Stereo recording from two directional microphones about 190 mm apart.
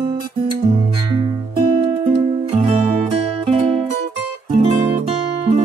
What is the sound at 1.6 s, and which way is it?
Music, 20° right (ahead or behind).